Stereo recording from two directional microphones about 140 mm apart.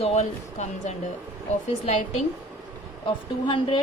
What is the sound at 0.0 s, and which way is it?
Speech, 50° left (ahead or behind).